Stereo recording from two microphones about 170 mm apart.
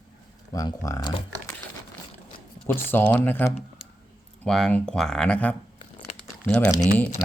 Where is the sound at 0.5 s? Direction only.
20° left (ahead or behind).